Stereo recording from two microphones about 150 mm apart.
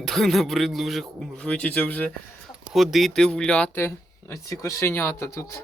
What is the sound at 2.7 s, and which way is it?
Speech, centre (ahead or behind).